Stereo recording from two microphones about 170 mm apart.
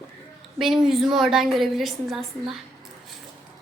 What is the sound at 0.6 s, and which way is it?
A woman's voice, centre (ahead or behind).